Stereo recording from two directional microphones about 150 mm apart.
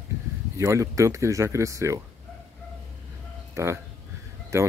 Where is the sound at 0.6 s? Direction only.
20° right (ahead or behind).